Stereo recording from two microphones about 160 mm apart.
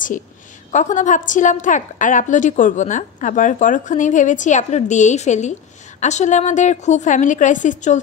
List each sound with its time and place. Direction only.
0.7 s a woman's voice: 50° left (ahead or behind)